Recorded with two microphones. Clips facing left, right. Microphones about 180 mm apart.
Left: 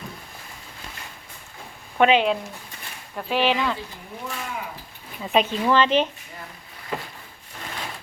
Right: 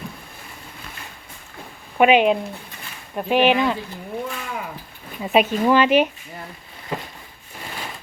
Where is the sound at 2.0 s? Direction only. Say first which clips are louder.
Right 3 dB; 15° right (ahead or behind).